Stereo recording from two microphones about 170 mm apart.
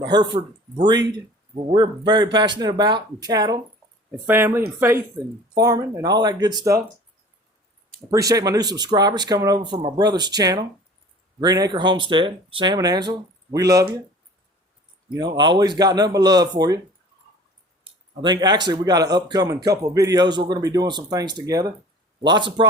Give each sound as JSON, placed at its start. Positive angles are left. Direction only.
{"t": 0.0, "sound": "speech", "side_deg": -25}
{"t": 1.7, "sound": "speech", "side_deg": -25}
{"t": 8.1, "sound": "speech", "side_deg": -20}
{"t": 15.1, "sound": "speech", "side_deg": -25}
{"t": 17.8, "sound": "speech", "side_deg": -25}